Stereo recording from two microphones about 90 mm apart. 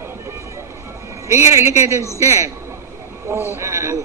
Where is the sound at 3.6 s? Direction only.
30° right (ahead or behind).